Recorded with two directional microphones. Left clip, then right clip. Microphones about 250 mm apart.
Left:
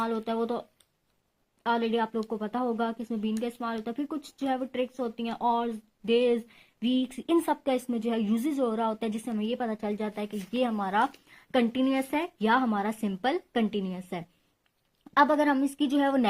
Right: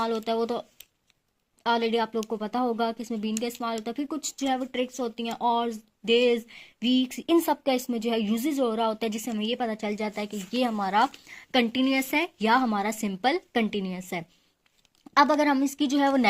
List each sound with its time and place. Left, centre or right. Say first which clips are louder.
0.0 s speech: right 3 dB; right
1.6 s speech: right 3 dB; right